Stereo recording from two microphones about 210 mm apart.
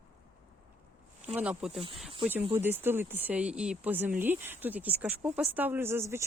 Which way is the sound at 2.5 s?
10° right (ahead or behind).